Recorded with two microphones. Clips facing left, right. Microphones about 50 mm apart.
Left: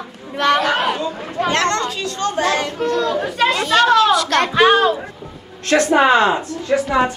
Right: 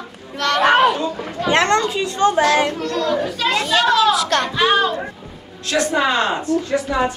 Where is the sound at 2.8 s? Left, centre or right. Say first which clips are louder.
Left 2 dB; left.